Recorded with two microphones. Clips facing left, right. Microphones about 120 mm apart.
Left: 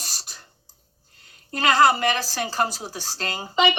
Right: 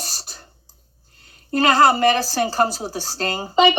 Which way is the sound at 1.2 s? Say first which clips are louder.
Right 8 dB; 35° right (ahead or behind).